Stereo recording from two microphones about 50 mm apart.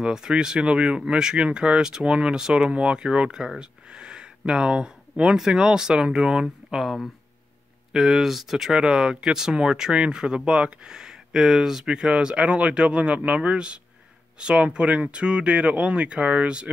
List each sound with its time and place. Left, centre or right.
0.0 s speech: centre
7.9 s speech: centre; by 16.7 s right